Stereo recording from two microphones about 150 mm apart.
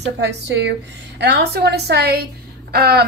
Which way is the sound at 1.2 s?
90° right.